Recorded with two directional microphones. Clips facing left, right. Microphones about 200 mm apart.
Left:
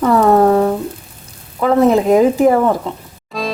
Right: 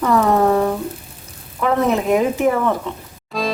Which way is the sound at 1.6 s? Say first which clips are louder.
Left 6 dB; 35° left (ahead or behind).